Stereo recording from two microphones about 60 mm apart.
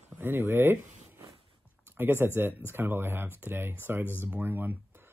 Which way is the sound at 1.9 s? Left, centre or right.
Right.